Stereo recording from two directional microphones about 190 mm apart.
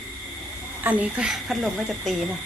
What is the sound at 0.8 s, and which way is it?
Speech, 10° right (ahead or behind).